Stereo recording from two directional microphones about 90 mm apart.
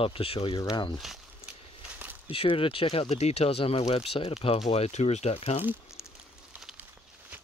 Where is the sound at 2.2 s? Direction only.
90° left.